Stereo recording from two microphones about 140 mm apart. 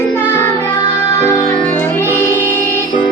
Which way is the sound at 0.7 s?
40° left (ahead or behind).